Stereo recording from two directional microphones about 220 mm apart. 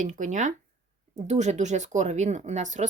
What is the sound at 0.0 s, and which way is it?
Speech, 35° right (ahead or behind).